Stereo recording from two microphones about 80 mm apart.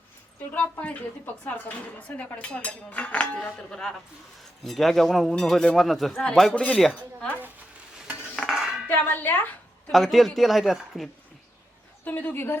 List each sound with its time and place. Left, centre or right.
0.5 s a man's voice: left
8.4 s dishes: centre
8.9 s speech: left
9.9 s a man's voice: centre
12.0 s speech: left